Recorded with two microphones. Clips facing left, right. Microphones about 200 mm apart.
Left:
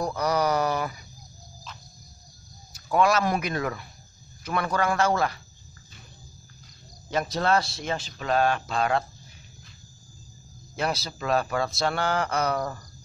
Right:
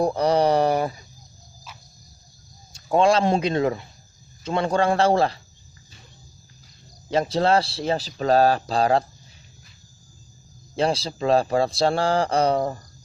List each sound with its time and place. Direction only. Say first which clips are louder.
0.0 s mantra: right 6 dB; 30° right (ahead or behind)
2.7 s a man's voice: right 4 dB; 30° right (ahead or behind)
7.1 s speech: right 5 dB; 30° right (ahead or behind)
10.8 s a man's voice: right 6 dB; 30° right (ahead or behind)